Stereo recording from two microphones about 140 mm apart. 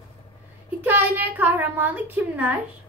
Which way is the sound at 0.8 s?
15° right (ahead or behind).